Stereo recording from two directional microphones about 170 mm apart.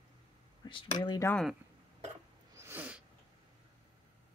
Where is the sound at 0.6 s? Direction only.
30° left (ahead or behind).